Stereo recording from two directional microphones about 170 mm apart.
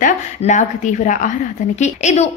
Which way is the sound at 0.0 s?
45° left (ahead or behind).